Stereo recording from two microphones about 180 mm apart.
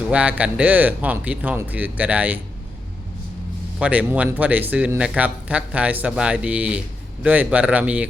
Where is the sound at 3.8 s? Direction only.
5° right (ahead or behind).